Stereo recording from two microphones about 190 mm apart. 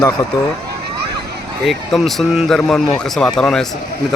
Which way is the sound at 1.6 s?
Centre (ahead or behind).